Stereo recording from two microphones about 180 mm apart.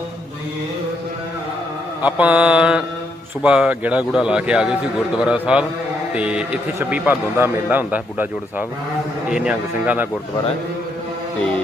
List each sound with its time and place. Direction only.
2.0 s a man's voice: 10° right (ahead or behind)